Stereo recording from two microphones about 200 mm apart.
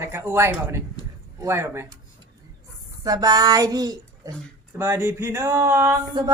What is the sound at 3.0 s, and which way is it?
A child's voice, 20° right (ahead or behind).